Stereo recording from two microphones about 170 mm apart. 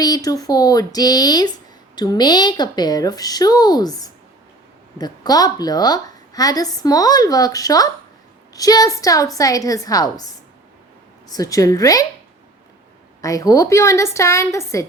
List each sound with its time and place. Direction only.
0.0 s a woman's voice: 20° left (ahead or behind)
11.3 s a woman's voice: 20° left (ahead or behind)
13.2 s a woman's voice: 20° left (ahead or behind)